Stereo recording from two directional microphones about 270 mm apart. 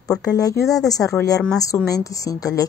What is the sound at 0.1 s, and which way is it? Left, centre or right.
A woman's voice, centre.